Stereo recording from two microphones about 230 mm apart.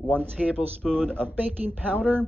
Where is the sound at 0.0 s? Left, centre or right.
Centre.